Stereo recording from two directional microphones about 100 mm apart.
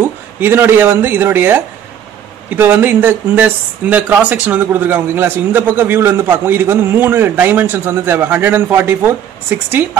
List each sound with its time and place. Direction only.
0.0 s speech: 20° right (ahead or behind)